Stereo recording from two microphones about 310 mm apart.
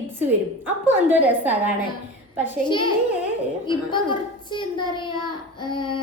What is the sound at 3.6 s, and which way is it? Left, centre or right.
A child's voice, centre.